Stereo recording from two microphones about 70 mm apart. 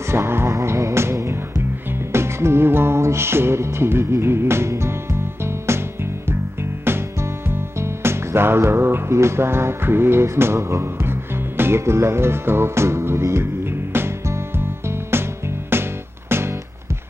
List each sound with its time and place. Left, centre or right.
0.1 s music: right
2.1 s music: right
6.8 s music: right